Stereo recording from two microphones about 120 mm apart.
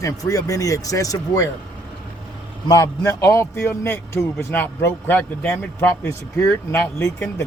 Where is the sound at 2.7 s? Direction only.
25° left (ahead or behind).